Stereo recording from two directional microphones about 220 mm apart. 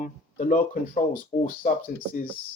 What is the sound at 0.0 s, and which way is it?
Speech, 35° left (ahead or behind).